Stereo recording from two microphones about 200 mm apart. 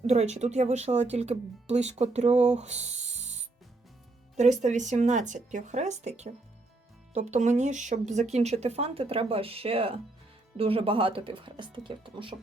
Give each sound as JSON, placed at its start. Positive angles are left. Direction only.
{"t": 0.1, "sound": "speech", "side_deg": -35}
{"t": 4.6, "sound": "speech", "side_deg": -35}